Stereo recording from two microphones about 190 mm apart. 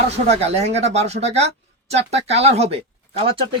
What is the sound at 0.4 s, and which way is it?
Speech, 35° right (ahead or behind).